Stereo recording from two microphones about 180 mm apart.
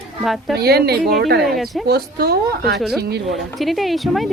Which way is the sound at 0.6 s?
60° right (ahead or behind).